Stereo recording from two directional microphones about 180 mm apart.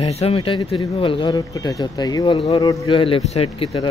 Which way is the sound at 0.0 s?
35° left (ahead or behind).